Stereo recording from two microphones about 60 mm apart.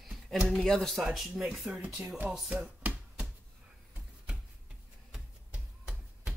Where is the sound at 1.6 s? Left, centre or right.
Right.